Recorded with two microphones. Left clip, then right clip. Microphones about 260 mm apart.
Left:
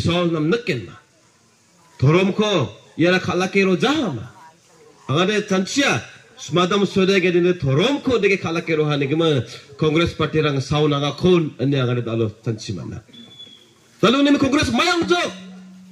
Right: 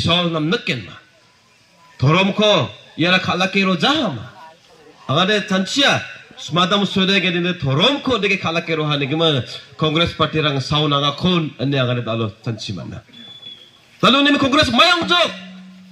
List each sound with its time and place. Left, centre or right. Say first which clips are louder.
0.0 s speech: right 2 dB; centre
2.0 s speech: right 2 dB; centre
14.0 s speech: right 2 dB; centre